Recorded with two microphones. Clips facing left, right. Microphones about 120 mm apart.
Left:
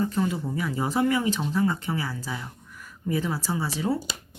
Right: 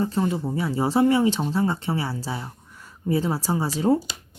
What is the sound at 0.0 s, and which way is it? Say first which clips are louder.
Speech: right 2 dB; 30° right (ahead or behind).